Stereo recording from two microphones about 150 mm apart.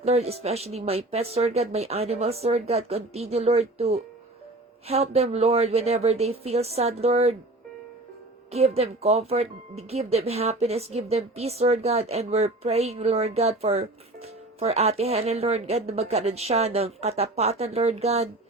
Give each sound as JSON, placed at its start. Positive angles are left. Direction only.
{"t": 0.0, "sound": "speech", "side_deg": -45}
{"t": 8.4, "sound": "speech", "side_deg": -45}